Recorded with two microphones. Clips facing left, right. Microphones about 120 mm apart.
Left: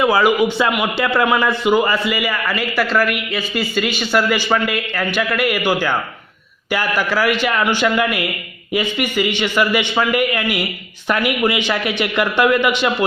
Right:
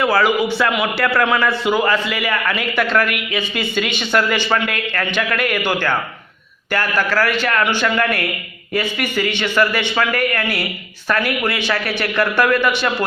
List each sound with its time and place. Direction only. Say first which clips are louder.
0.0 s speech: left 2 dB; 15° left (ahead or behind)